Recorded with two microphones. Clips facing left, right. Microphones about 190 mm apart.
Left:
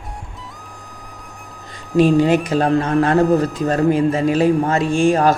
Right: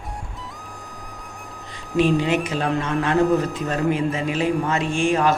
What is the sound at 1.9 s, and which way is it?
A man's voice, 40° left (ahead or behind).